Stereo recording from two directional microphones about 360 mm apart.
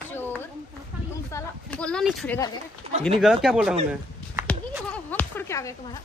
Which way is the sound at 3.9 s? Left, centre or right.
Centre.